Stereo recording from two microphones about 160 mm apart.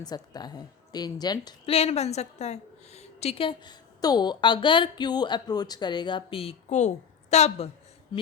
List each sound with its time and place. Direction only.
0.0 s a woman's voice: 25° left (ahead or behind)
1.7 s a woman's voice: 40° left (ahead or behind)